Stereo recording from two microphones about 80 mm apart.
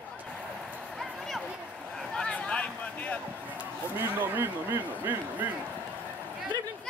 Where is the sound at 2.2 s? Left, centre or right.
Centre.